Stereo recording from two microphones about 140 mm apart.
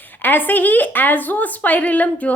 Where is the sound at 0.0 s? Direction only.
15° left (ahead or behind).